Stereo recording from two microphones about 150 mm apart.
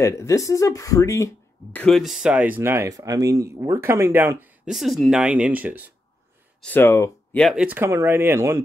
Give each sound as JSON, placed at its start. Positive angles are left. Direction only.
{"t": 0.0, "sound": "speech", "side_deg": 20}
{"t": 2.0, "sound": "speech", "side_deg": 0}
{"t": 4.6, "sound": "speech", "side_deg": 0}
{"t": 6.6, "sound": "speech", "side_deg": 15}
{"t": 7.5, "sound": "speech", "side_deg": -10}